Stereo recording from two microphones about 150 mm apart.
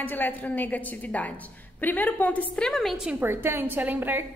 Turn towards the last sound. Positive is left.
turn(degrees=-10)  # may be behind; listen again after turning